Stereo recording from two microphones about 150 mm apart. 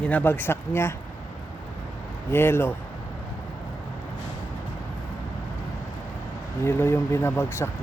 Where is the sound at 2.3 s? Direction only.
15° left (ahead or behind).